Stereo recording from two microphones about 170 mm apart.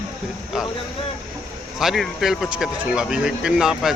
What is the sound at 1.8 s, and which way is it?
Speech, centre (ahead or behind).